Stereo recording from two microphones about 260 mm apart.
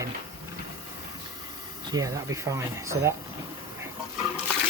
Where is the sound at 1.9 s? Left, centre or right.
Centre.